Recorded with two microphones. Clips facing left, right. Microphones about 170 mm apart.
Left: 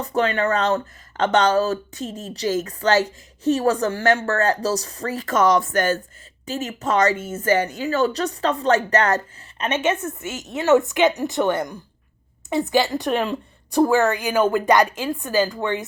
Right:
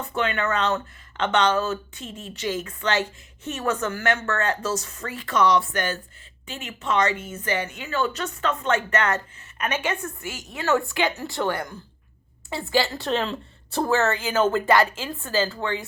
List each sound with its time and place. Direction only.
0.0 s speech: 35° left (ahead or behind)
9.6 s a woman's voice: 25° left (ahead or behind)